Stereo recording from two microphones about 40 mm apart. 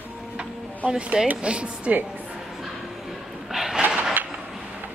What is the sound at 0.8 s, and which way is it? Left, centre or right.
Speech, right.